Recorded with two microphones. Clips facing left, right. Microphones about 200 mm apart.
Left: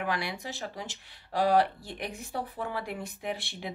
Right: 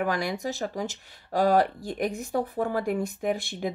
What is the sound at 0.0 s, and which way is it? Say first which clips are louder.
Speech: right 6 dB; 45° right (ahead or behind).